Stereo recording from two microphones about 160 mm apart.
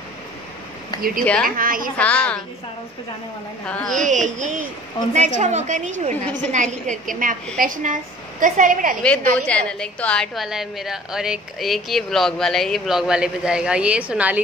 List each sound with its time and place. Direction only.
1.4 s a woman's voice: 60° right (ahead or behind)
2.0 s a woman's voice: 5° left (ahead or behind)
3.6 s a woman's voice: 5° left (ahead or behind)
4.1 s a woman's voice: 50° right (ahead or behind)
9.0 s a woman's voice: 5° left (ahead or behind); by 14.4 s 10° right (ahead or behind)